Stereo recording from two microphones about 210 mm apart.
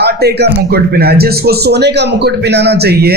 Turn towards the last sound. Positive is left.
turn(degrees=-50)  # may be behind; listen again after turning